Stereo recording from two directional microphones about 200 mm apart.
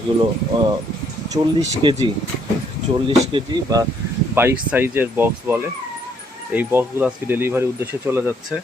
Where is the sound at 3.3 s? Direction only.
20° right (ahead or behind).